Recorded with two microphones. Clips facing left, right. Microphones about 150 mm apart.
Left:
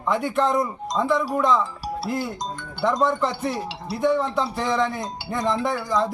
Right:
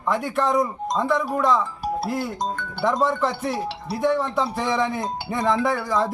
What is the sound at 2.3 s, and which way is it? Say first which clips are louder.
Music: right 4 dB; 55° right (ahead or behind).